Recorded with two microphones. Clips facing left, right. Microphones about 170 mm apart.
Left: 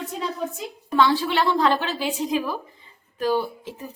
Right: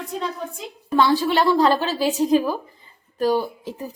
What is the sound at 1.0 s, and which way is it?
Speech, 40° right (ahead or behind).